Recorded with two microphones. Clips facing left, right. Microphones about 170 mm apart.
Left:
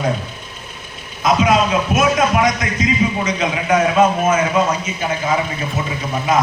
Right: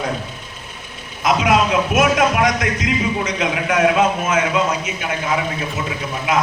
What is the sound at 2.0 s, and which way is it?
A man's voice, 65° right (ahead or behind).